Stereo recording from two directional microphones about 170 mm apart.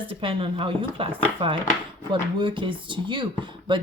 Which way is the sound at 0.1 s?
30° right (ahead or behind).